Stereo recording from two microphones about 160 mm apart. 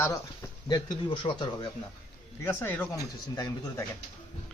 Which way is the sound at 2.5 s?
15° left (ahead or behind).